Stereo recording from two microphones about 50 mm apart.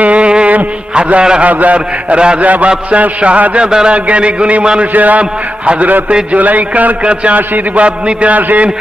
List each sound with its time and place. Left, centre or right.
0.0 s music: right
0.9 s a man's voice: centre